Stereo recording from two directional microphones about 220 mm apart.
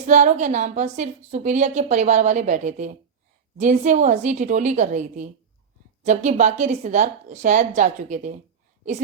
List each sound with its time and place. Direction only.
0.1 s a woman's voice: 35° right (ahead or behind)